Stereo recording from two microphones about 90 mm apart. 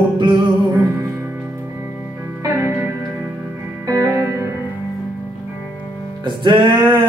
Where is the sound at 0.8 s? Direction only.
35° right (ahead or behind).